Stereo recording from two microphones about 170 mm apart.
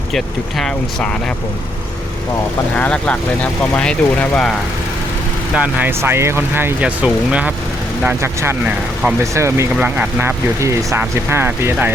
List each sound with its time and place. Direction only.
0.1 s speech: centre (ahead or behind)
2.7 s speech: 10° left (ahead or behind)
5.5 s speech: 10° right (ahead or behind)